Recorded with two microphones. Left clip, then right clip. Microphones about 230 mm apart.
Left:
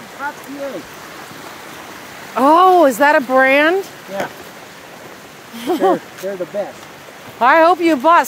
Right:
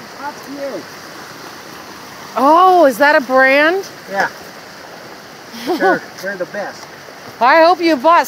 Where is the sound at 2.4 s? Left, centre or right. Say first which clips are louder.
Right 1 dB; centre.